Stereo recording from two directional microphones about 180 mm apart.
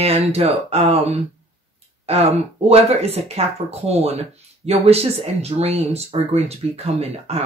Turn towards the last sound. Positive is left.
turn(degrees=-35)  # may be behind; listen again after turning